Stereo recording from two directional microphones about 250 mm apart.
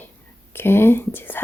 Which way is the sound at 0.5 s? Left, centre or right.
Centre.